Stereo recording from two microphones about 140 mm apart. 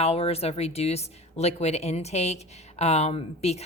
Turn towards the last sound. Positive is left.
turn(degrees=50)  # may be behind; listen again after turning